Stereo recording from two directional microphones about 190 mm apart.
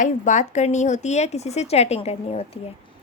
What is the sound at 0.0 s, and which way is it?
A woman's voice, 40° left (ahead or behind).